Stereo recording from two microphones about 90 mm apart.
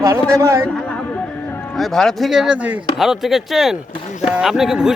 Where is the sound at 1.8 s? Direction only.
Centre (ahead or behind).